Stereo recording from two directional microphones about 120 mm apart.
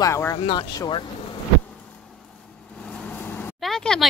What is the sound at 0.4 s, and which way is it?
Speech, 40° left (ahead or behind).